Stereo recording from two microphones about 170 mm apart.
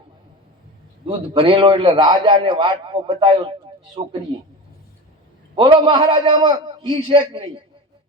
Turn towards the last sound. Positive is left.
turn(degrees=-30)  # may be behind; listen again after turning